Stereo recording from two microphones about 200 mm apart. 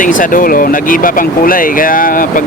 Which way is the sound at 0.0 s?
40° left (ahead or behind).